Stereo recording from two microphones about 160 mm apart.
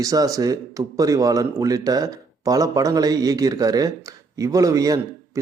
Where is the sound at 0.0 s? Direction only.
20° right (ahead or behind).